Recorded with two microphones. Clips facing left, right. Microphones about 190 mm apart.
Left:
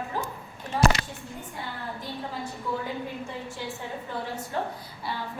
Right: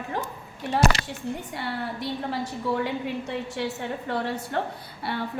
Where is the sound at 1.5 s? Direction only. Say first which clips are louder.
Right 5 dB; 75° right (ahead or behind).